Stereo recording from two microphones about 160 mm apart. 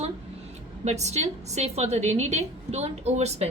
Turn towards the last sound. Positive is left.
turn(degrees=-40)  # may be behind; listen again after turning